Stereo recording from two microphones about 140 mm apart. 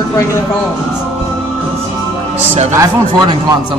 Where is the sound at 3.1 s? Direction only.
35° right (ahead or behind).